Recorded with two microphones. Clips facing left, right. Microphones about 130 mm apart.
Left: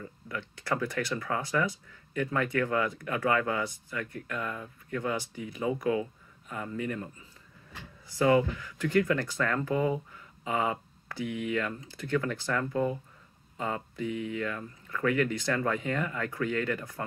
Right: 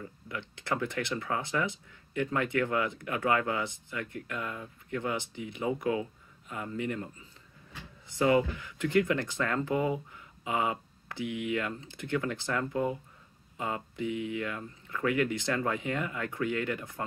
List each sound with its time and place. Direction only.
0.0 s speech: 20° right (ahead or behind)
13.9 s speech: 20° right (ahead or behind)